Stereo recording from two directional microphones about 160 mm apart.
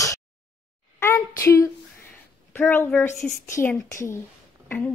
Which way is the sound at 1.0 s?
15° left (ahead or behind).